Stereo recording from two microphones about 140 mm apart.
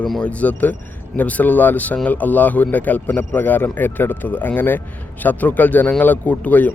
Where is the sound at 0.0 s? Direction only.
5° left (ahead or behind).